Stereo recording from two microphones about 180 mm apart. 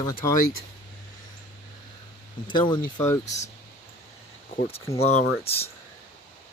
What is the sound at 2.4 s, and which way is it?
Speech, 25° left (ahead or behind).